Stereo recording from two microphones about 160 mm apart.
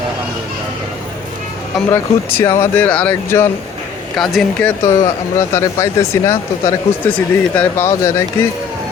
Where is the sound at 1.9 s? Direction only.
15° left (ahead or behind).